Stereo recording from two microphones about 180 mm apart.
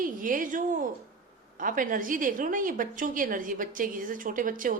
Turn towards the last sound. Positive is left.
turn(degrees=-50)  # may be behind; listen again after turning